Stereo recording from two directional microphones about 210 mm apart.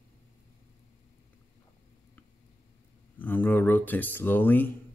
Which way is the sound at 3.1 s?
10° left (ahead or behind).